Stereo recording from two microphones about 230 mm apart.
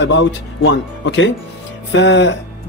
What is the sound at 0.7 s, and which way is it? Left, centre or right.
A man's voice, left.